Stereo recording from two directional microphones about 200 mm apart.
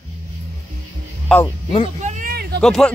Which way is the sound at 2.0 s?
45° right (ahead or behind).